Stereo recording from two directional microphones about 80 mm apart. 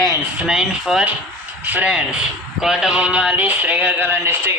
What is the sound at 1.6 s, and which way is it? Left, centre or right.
Speech, centre.